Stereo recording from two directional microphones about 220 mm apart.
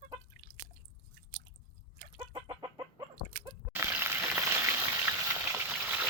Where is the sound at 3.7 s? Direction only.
10° right (ahead or behind).